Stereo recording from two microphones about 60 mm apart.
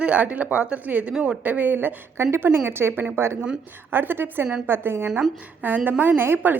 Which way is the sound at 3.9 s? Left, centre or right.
Right.